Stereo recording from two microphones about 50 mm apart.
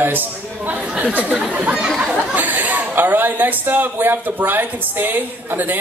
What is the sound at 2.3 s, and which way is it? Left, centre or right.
Speech, right.